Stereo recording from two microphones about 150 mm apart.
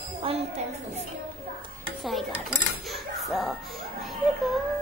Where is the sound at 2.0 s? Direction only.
Centre (ahead or behind).